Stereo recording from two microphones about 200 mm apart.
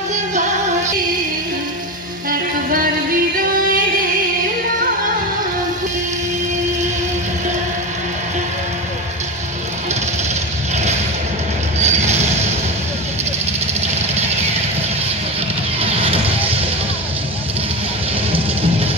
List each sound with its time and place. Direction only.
0.1 s music: 35° right (ahead or behind)
11.8 s a sound: 35° right (ahead or behind)
15.8 s vehicle: 30° right (ahead or behind)